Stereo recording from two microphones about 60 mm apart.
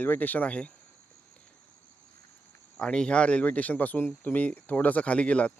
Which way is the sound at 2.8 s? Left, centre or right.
Centre.